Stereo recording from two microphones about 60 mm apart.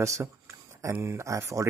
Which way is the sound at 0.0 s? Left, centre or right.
Right.